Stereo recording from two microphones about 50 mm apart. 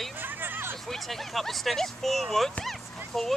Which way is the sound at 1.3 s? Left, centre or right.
Centre.